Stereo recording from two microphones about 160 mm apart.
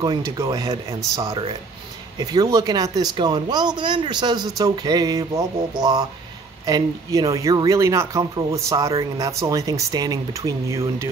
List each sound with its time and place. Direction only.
0.0 s speech: 25° right (ahead or behind)